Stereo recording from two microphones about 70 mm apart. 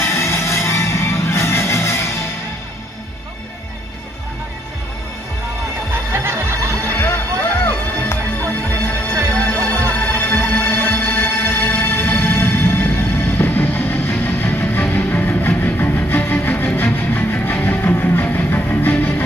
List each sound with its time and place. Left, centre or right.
0.0 s music: left
6.1 s music: right
6.9 s music: left